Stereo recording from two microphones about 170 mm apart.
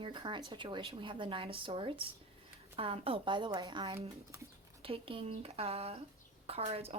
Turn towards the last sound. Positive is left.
turn(degrees=-35)  # may be behind; listen again after turning